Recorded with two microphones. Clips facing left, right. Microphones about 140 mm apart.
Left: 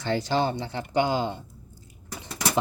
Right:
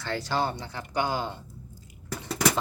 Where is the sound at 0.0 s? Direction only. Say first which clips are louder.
Left 4 dB; 20° left (ahead or behind).